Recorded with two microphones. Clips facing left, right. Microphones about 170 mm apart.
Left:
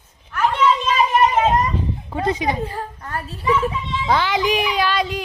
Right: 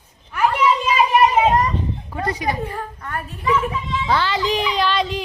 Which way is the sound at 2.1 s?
20° left (ahead or behind).